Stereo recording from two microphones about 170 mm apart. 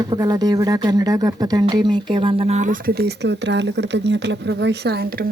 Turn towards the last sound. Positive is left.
turn(degrees=-65)  # may be behind; listen again after turning